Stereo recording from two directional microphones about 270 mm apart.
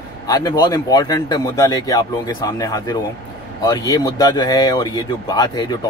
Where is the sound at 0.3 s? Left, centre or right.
Centre.